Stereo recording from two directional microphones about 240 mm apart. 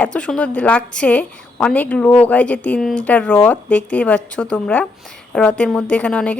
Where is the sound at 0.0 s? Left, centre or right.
Centre.